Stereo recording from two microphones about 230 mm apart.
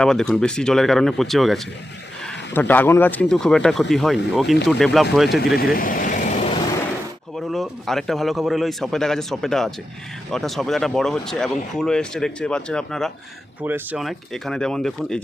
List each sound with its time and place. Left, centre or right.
0.0 s speech: centre
5.7 s vehicle: left
7.3 s speech: centre